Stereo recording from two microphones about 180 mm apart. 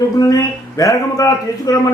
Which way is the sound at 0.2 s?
20° left (ahead or behind).